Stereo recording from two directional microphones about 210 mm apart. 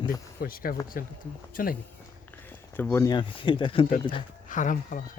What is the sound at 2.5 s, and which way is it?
Speech, 10° left (ahead or behind).